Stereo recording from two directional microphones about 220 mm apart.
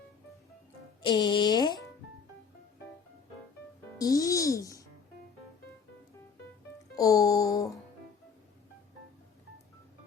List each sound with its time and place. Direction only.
1.0 s speech: 20° left (ahead or behind)
3.9 s a child's voice: 15° left (ahead or behind)
6.9 s music: 15° left (ahead or behind)